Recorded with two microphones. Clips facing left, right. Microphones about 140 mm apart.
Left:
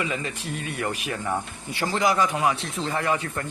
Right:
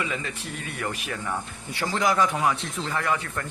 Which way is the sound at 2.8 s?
25° left (ahead or behind).